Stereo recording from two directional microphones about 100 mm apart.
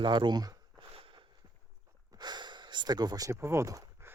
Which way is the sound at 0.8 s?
65° right (ahead or behind).